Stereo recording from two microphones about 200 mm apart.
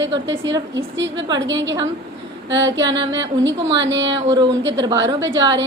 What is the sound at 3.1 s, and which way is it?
A woman's voice, 65° right (ahead or behind).